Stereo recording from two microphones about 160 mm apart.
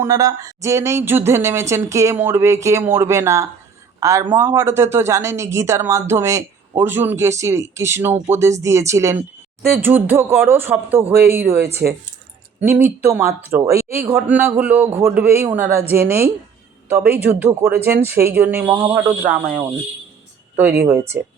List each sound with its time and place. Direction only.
0.0 s a man's voice: 20° right (ahead or behind)
20.8 s speech: 15° right (ahead or behind)